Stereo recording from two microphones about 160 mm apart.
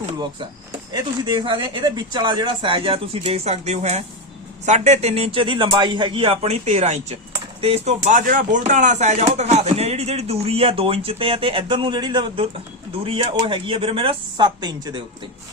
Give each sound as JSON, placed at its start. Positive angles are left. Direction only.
{"t": 1.2, "sound": "speech", "side_deg": -30}